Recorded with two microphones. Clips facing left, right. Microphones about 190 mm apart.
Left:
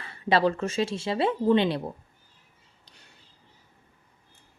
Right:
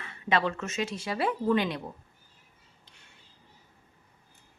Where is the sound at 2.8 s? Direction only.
35° left (ahead or behind).